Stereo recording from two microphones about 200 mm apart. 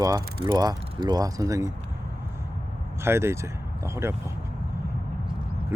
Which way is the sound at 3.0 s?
10° right (ahead or behind).